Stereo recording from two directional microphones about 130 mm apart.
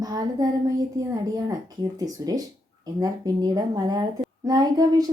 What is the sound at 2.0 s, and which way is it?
A child's voice, 30° right (ahead or behind).